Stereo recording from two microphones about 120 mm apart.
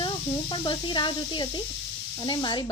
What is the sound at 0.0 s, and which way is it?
A woman's voice, 40° left (ahead or behind).